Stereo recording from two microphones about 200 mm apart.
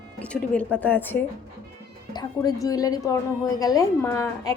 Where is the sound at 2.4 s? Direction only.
20° left (ahead or behind).